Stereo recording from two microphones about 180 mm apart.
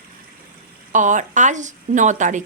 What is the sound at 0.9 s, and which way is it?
Speech, 45° right (ahead or behind).